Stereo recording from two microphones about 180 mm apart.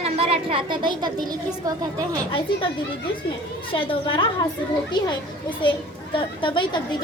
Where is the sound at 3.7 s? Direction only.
30° left (ahead or behind).